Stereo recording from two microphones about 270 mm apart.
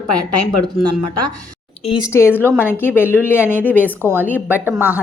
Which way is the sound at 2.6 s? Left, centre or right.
Centre.